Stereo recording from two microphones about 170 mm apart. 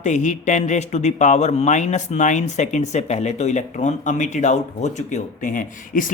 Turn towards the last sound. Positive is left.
turn(degrees=50)  # may be behind; listen again after turning